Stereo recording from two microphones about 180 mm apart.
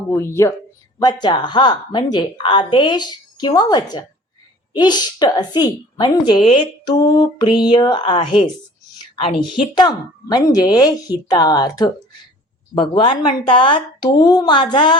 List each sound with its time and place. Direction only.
0.1 s speech: 15° left (ahead or behind)
0.9 s speech: 25° left (ahead or behind)